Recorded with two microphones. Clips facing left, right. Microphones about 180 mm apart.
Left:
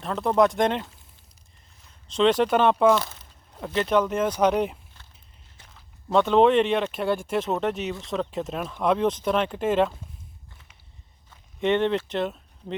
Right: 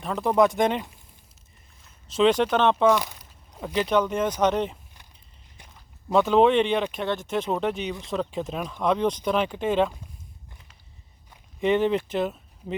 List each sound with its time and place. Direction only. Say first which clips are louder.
0.0 s speech: even; 5° right (ahead or behind)
2.0 s speech: even; 5° right (ahead or behind)
2.9 s speech: left 1 dB; 15° right (ahead or behind)
3.8 s speech: left 1 dB; centre (ahead or behind)
6.1 s speech: even; centre (ahead or behind)
11.6 s speech: right 1 dB; 5° right (ahead or behind)